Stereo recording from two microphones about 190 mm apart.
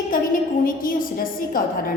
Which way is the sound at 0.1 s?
45° left (ahead or behind).